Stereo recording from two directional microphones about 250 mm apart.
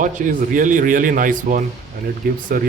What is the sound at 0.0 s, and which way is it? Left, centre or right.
Speech, right.